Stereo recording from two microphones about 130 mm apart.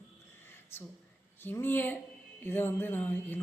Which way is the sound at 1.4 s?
15° left (ahead or behind).